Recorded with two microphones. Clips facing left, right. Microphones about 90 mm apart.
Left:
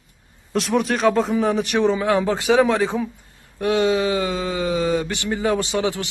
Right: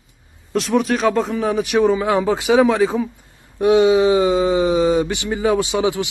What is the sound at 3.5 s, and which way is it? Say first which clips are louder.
A man's voice: right 6 dB; 15° right (ahead or behind).